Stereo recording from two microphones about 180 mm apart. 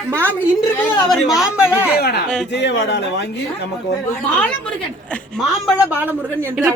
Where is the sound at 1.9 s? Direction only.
60° left (ahead or behind).